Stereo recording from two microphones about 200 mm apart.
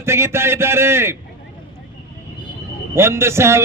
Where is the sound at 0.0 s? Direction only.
15° right (ahead or behind).